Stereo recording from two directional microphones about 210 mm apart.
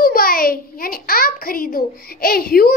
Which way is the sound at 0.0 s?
45° left (ahead or behind).